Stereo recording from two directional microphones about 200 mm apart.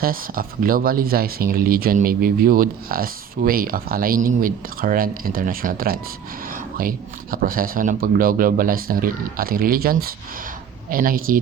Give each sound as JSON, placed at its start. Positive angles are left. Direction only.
{"t": 0.0, "sound": "speech", "side_deg": -45}